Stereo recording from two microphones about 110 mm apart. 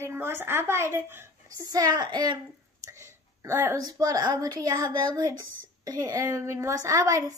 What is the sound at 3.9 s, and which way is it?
Child singing, 35° right (ahead or behind).